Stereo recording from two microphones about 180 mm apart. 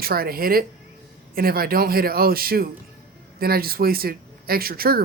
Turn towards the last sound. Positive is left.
turn(degrees=-55)  # may be behind; listen again after turning